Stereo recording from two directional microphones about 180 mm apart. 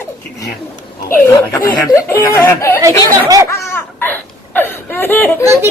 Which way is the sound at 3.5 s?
15° left (ahead or behind).